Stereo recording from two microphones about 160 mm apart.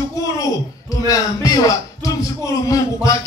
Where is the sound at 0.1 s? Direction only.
20° left (ahead or behind).